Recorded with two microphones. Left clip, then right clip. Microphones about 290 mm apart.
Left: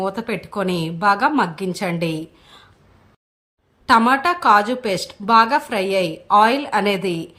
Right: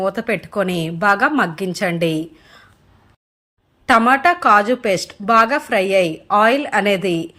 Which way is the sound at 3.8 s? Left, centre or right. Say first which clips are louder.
Right 2 dB; centre.